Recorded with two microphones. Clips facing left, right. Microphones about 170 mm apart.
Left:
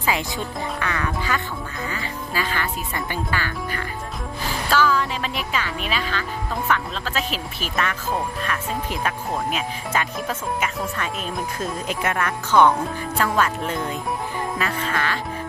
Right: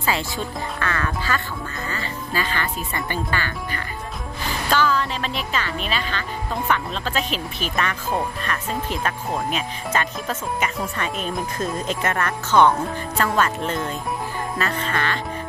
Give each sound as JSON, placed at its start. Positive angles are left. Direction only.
{"t": 0.7, "sound": "speech", "side_deg": 15}